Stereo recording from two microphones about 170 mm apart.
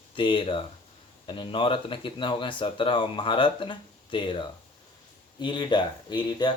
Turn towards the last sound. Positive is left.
turn(degrees=25)  # may be behind; listen again after turning